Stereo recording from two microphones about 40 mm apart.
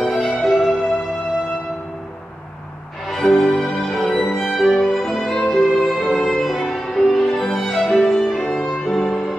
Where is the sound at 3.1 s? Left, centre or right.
Centre.